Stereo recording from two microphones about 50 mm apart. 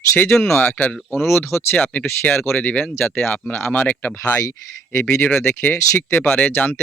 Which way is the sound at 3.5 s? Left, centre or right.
Left.